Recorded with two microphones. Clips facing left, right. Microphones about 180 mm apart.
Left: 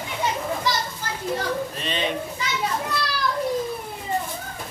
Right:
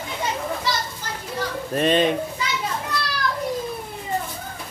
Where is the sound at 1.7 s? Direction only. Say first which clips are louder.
Right 11 dB; 50° right (ahead or behind).